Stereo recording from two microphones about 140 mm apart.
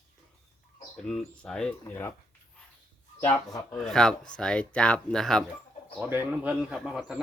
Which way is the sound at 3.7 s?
5° left (ahead or behind).